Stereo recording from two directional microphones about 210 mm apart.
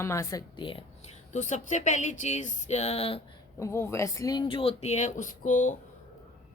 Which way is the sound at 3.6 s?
15° left (ahead or behind).